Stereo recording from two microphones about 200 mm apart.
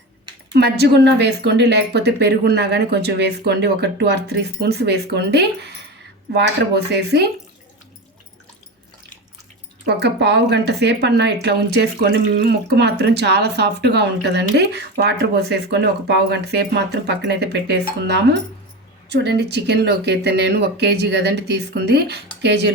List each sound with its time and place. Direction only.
0.5 s speech: 55° right (ahead or behind)
9.8 s speech: 60° right (ahead or behind)
19.0 s speech: 55° right (ahead or behind)